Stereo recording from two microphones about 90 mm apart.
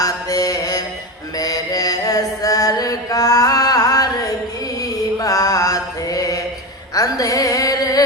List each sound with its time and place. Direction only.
0.0 s mantra: 40° left (ahead or behind)
6.9 s music: 40° left (ahead or behind)